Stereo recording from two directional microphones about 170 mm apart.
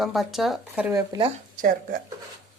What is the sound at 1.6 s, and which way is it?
Speech, 55° right (ahead or behind).